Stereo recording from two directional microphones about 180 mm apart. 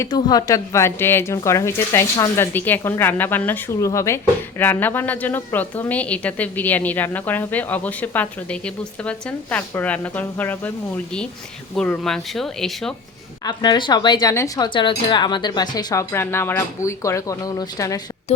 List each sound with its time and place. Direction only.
0.0 s a woman's voice: 20° left (ahead or behind); by 12.9 s centre (ahead or behind)
13.4 s speech: 25° left (ahead or behind)
18.3 s a sound: 35° left (ahead or behind)